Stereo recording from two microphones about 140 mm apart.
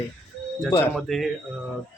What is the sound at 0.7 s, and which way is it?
Speech, 15° left (ahead or behind).